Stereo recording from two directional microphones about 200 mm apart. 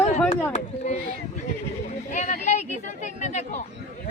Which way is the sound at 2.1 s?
35° left (ahead or behind).